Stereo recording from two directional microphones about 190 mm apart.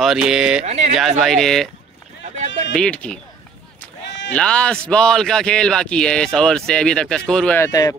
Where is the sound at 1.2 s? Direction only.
Centre (ahead or behind).